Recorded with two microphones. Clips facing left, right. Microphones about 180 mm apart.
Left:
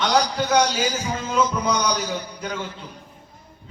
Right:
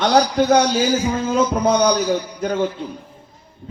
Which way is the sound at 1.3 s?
55° right (ahead or behind).